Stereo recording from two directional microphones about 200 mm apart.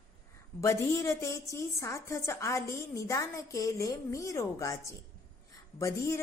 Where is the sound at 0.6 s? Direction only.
15° left (ahead or behind).